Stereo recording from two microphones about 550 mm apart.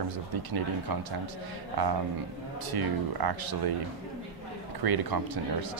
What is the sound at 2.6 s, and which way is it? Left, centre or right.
Speech, right.